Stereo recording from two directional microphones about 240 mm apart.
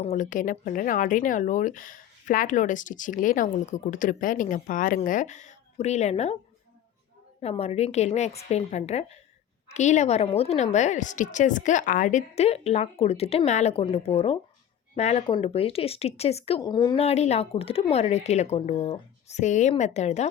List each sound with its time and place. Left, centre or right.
0.0 s speech: left
7.4 s speech: left